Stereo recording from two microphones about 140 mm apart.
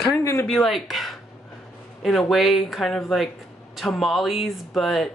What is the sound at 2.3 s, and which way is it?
Speech, centre (ahead or behind).